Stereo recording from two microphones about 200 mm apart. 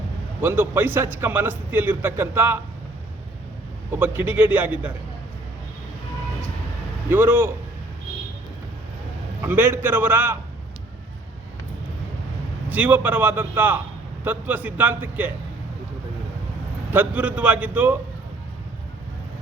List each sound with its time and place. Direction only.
0.4 s a man's voice: 10° right (ahead or behind)
3.9 s a man's voice: 10° right (ahead or behind)
7.1 s a man's voice: 10° right (ahead or behind)
9.4 s a man's voice: 10° right (ahead or behind)
12.6 s a man's voice: 10° right (ahead or behind)
16.9 s a man's voice: 10° right (ahead or behind)